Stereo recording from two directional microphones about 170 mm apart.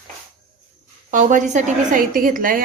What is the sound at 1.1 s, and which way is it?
A woman's voice, 50° right (ahead or behind).